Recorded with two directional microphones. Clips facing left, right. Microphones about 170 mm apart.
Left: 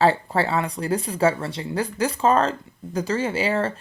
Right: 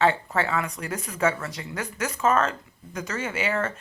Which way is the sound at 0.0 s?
35° left (ahead or behind).